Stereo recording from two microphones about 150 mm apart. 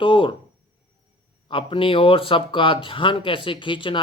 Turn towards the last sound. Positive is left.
turn(degrees=35)  # may be behind; listen again after turning